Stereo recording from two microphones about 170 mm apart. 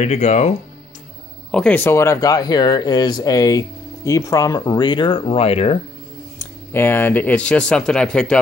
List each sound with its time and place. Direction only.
0.0 s speech: 40° left (ahead or behind)
1.5 s speech: 5° left (ahead or behind); by 5.8 s 35° left (ahead or behind)
6.3 s speech: 15° left (ahead or behind)